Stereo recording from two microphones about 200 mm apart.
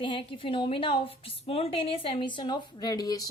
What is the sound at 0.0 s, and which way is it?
A woman's voice, 25° left (ahead or behind).